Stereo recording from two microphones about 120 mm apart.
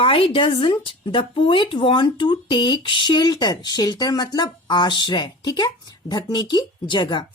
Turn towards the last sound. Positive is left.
turn(degrees=40)  # may be behind; listen again after turning